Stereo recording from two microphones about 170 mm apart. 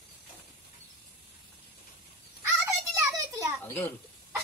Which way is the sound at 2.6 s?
20° right (ahead or behind).